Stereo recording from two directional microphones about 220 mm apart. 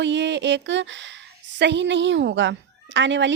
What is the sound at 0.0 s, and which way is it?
A woman's voice, 55° right (ahead or behind).